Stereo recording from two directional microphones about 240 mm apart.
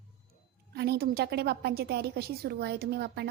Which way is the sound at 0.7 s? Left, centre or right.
Right.